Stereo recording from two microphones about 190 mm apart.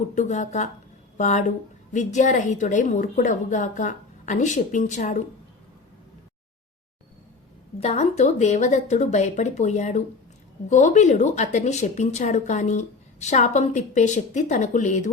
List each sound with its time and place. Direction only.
0.1 s speech: 40° left (ahead or behind)
7.8 s speech: 35° left (ahead or behind)